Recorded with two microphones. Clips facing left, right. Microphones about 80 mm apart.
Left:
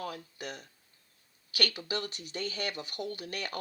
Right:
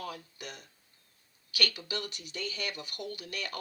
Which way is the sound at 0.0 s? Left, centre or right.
Left.